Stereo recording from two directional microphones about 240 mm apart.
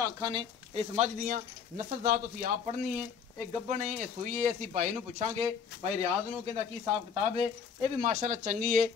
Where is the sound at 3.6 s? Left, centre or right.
Right.